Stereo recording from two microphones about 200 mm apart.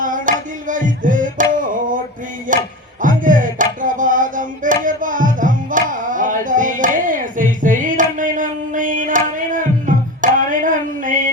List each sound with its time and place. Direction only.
0.0 s music: 40° right (ahead or behind)